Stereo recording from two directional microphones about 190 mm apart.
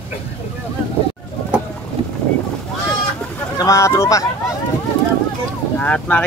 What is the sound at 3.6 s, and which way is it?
Speech, 15° left (ahead or behind).